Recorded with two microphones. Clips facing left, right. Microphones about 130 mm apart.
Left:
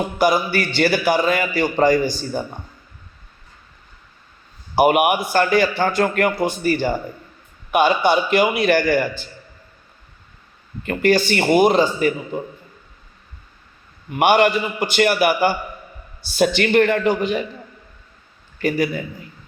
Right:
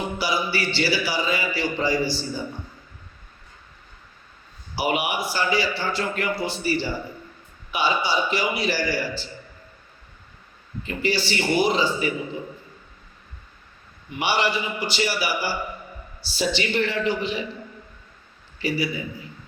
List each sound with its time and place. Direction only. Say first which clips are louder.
0.2 s a man's voice: left 9 dB; 50° left (ahead or behind)
4.7 s a man's voice: left 9 dB; 55° left (ahead or behind)
10.8 s a man's voice: left 8 dB; 50° left (ahead or behind)
14.1 s a man's voice: left 9 dB; 55° left (ahead or behind)
18.6 s a man's voice: left 5 dB; 50° left (ahead or behind)